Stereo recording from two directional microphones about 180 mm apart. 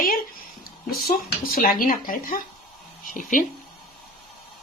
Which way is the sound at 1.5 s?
50° left (ahead or behind).